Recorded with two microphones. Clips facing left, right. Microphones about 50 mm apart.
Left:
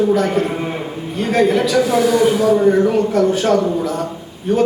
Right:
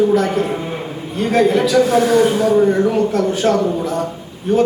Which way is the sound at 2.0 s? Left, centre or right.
Right.